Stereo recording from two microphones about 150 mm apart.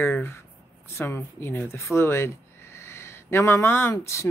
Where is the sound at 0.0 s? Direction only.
15° left (ahead or behind).